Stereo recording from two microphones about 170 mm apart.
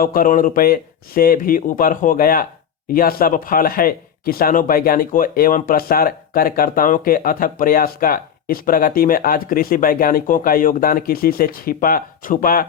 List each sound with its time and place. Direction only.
0.0 s speech: 55° left (ahead or behind)